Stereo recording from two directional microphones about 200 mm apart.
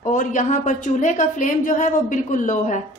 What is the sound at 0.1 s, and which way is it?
A woman's voice, 40° left (ahead or behind).